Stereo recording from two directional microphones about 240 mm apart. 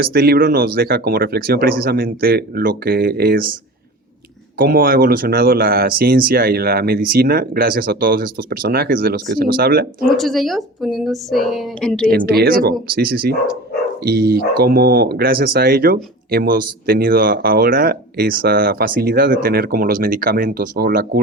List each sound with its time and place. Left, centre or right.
0.0 s speech: right
10.2 s a woman's voice: centre
12.2 s speech: right